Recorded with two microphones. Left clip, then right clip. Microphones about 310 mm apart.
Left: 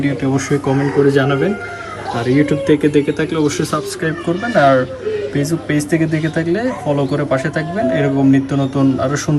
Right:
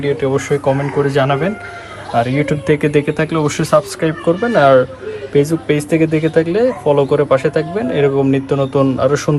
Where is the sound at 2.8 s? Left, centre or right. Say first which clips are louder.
Even; right.